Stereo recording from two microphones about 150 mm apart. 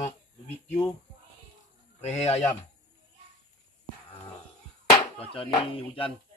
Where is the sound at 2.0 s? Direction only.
45° left (ahead or behind).